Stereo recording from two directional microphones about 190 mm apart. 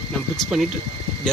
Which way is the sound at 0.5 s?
5° right (ahead or behind).